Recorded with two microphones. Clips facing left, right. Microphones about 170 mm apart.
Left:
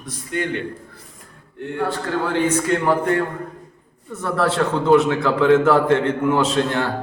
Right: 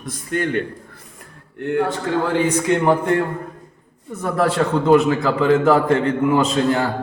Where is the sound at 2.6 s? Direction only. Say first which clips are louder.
Right 2 dB; 20° right (ahead or behind).